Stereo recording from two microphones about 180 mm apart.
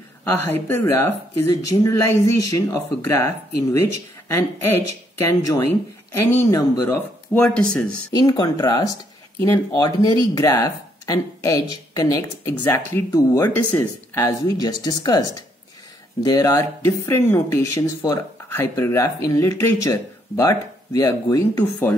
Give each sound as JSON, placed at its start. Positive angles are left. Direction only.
{"t": 0.2, "sound": "speech", "side_deg": 10}
{"t": 4.3, "sound": "speech", "side_deg": 15}
{"t": 7.3, "sound": "speech", "side_deg": 5}
{"t": 8.1, "sound": "speech", "side_deg": 20}